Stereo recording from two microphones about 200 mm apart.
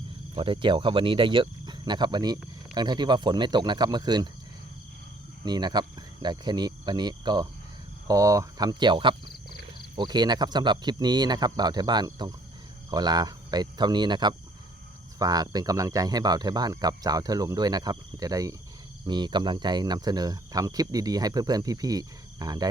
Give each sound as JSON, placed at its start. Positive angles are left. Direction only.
{"t": 0.3, "sound": "speech", "side_deg": -25}
{"t": 5.5, "sound": "speech", "side_deg": -20}